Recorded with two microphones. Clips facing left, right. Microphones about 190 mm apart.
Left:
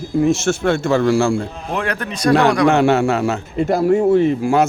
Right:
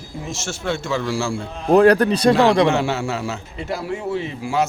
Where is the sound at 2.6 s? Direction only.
55° left (ahead or behind).